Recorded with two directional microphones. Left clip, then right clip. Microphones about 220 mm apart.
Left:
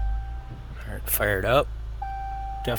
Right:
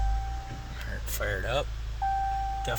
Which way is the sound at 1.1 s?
40° left (ahead or behind).